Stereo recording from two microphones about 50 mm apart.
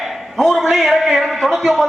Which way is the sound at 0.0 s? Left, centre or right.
Centre.